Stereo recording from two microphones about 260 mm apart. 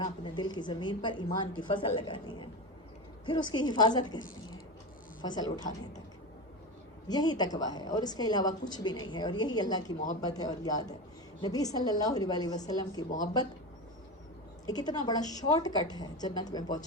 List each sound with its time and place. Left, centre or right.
0.0 s a woman's voice: centre
5.2 s a woman's voice: centre
5.5 s a woman's voice: left
7.1 s a woman's voice: centre
14.7 s a woman's voice: centre